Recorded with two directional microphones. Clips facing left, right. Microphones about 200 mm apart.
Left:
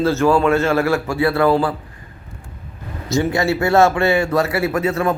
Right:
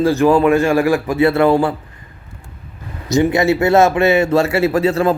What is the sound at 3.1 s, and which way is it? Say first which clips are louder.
A man's voice: right 4 dB; 20° right (ahead or behind).